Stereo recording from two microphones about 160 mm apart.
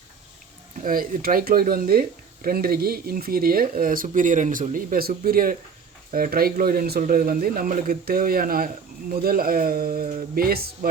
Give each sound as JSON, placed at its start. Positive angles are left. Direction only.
{"t": 0.8, "sound": "speech", "side_deg": -60}